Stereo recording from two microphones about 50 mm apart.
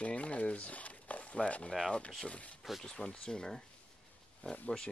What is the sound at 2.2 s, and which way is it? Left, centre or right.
Speech, left.